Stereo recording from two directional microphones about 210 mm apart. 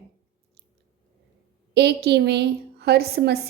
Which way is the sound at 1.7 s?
50° right (ahead or behind).